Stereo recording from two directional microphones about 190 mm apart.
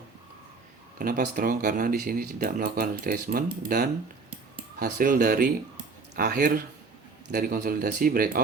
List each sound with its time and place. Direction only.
0.9 s speech: 45° right (ahead or behind)